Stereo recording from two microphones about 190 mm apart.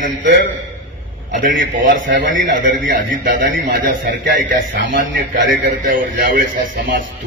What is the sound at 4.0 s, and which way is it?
A man's voice, 45° right (ahead or behind).